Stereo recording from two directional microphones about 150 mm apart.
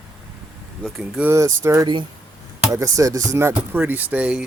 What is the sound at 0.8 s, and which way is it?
Speech, centre (ahead or behind).